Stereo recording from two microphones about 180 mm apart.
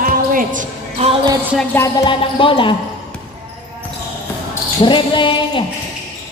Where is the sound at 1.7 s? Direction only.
10° left (ahead or behind).